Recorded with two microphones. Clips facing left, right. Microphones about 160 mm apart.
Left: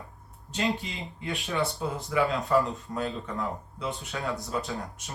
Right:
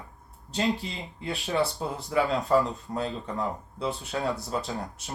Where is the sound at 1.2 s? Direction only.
35° right (ahead or behind).